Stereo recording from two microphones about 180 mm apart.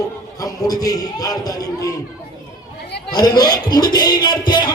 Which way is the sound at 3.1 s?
20° left (ahead or behind).